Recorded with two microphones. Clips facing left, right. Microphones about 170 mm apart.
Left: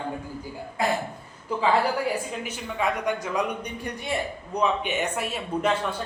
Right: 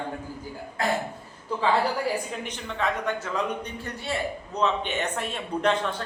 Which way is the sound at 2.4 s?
10° left (ahead or behind).